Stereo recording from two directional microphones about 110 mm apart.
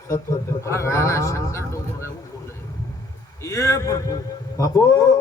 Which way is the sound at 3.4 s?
30° left (ahead or behind).